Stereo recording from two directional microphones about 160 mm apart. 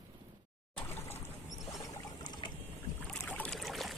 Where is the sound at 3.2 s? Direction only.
10° left (ahead or behind).